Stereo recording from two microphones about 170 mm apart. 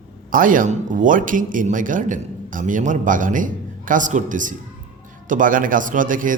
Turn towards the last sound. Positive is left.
turn(degrees=-50)  # may be behind; listen again after turning